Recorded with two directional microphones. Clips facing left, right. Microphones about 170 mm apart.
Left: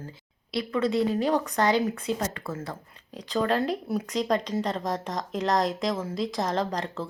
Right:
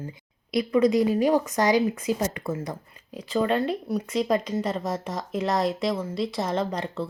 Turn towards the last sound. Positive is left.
turn(degrees=0)  # may be behind; listen again after turning